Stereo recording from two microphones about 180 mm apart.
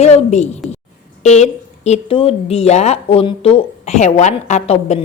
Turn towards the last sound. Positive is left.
turn(degrees=40)  # may be behind; listen again after turning